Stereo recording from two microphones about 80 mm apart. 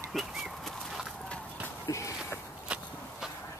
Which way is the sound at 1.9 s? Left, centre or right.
Left.